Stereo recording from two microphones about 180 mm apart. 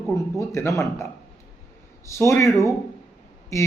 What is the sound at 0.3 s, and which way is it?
Speech, 15° left (ahead or behind).